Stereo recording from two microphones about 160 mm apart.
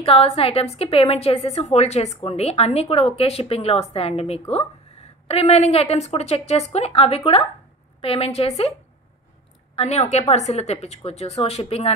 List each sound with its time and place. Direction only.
0.0 s speech: 35° left (ahead or behind)
9.8 s a woman's voice: 45° left (ahead or behind)